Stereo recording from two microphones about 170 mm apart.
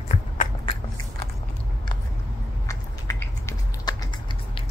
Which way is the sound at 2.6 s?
20° left (ahead or behind).